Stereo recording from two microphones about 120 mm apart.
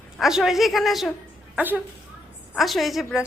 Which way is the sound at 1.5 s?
15° right (ahead or behind).